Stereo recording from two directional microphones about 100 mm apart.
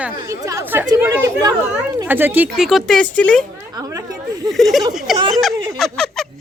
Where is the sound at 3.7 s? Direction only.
35° right (ahead or behind).